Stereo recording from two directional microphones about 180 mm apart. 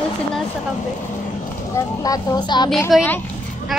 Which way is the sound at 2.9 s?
Centre (ahead or behind).